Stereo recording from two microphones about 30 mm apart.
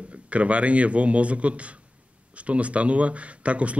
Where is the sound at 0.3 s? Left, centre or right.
Right.